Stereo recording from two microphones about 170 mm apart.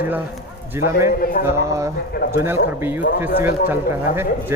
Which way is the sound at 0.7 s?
15° right (ahead or behind).